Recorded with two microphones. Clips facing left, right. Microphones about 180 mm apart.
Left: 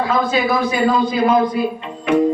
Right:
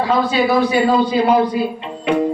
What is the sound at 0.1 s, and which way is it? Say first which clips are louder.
A woman's voice: right 4 dB; 35° right (ahead or behind).